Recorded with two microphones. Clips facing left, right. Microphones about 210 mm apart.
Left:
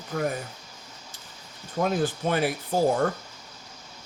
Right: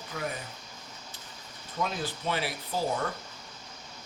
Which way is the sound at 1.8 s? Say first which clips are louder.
Left 8 dB; 50° left (ahead or behind).